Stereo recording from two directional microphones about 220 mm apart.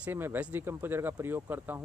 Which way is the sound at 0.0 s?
10° right (ahead or behind).